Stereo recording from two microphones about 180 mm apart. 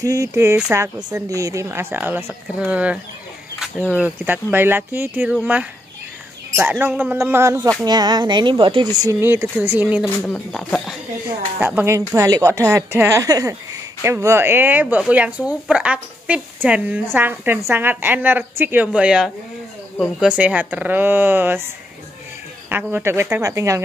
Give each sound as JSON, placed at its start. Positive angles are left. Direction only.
{"t": 0.0, "sound": "speech", "side_deg": -20}
{"t": 10.0, "sound": "speech", "side_deg": 5}
{"t": 11.6, "sound": "speech", "side_deg": -10}
{"t": 22.7, "sound": "speech", "side_deg": -10}